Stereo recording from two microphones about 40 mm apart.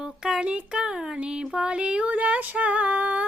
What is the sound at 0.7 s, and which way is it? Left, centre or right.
Speech, centre.